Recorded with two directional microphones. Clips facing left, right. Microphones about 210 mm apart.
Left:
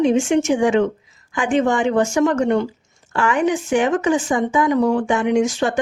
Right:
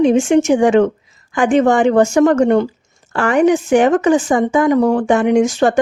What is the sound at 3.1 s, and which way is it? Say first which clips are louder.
Speech: right 5 dB; 65° right (ahead or behind).